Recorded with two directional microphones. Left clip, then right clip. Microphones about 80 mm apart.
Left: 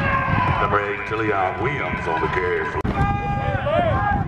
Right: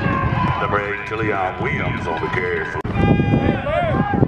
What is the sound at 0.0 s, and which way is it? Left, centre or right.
Speech, right.